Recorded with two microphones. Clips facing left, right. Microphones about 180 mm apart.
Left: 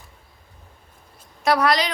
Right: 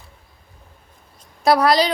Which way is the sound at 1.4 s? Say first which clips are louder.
Right 4 dB; 35° right (ahead or behind).